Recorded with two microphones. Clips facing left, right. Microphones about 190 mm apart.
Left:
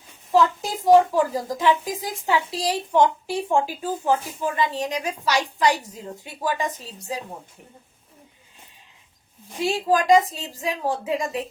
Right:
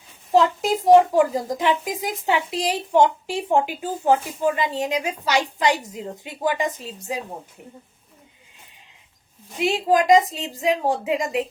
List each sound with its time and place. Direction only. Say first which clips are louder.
0.3 s a woman's voice: right 2 dB; 25° right (ahead or behind)
9.6 s a woman's voice: right 2 dB; 20° right (ahead or behind)